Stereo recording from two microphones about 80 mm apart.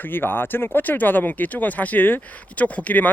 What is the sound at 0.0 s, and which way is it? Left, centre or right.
Speech, left.